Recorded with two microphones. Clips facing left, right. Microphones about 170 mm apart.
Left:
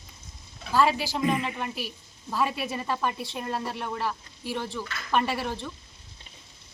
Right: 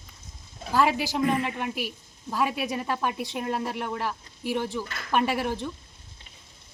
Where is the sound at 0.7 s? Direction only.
15° right (ahead or behind).